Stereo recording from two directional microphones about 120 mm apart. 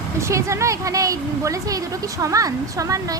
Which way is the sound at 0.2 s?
25° right (ahead or behind).